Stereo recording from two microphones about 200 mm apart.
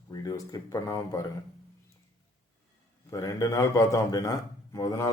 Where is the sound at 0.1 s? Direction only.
20° left (ahead or behind).